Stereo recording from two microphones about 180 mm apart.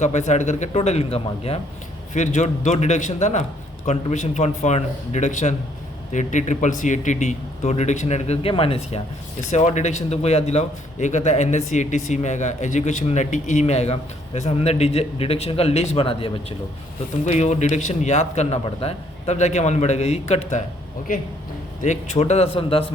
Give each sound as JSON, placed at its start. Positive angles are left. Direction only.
{"t": 0.0, "sound": "a man's voice", "side_deg": 40}
{"t": 21.8, "sound": "a man's voice", "side_deg": 40}